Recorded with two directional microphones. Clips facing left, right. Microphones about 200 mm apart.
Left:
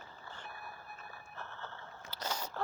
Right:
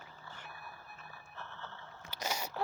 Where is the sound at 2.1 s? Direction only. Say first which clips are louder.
Right 1 dB; 10° right (ahead or behind).